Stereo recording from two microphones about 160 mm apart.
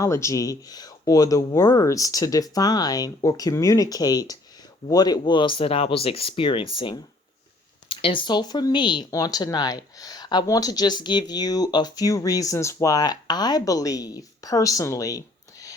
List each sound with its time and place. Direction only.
0.0 s speech: 20° left (ahead or behind)